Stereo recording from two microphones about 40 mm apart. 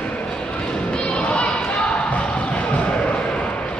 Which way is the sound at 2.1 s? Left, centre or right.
Left.